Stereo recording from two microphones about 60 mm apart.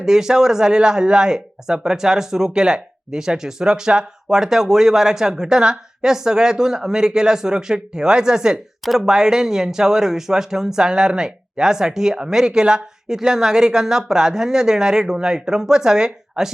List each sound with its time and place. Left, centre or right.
0.0 s speech: centre